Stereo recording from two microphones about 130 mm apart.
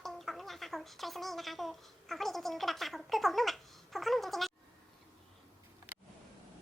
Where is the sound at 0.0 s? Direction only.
Centre (ahead or behind).